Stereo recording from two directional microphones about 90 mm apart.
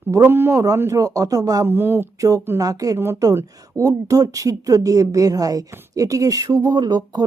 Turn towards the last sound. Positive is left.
turn(degrees=-50)  # may be behind; listen again after turning